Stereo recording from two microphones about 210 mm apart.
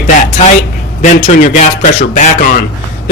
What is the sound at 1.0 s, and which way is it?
A man's voice, 35° left (ahead or behind).